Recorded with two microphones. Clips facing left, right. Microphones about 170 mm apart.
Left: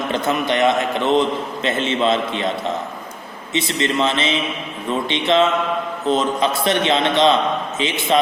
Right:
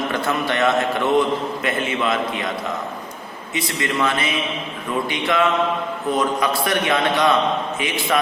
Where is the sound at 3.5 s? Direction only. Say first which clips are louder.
Left 3 dB; 25° left (ahead or behind).